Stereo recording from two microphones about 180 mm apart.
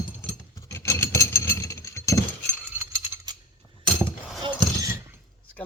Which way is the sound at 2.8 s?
25° right (ahead or behind).